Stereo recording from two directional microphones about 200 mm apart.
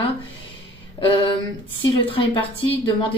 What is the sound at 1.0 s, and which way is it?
Speech, 25° left (ahead or behind).